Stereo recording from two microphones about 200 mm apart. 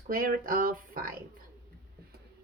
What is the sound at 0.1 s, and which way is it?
Speech, 45° right (ahead or behind).